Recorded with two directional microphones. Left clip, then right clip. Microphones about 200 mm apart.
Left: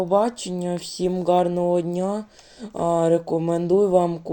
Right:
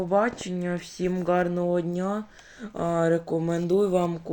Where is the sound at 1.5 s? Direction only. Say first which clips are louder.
Left 5 dB; 20° left (ahead or behind).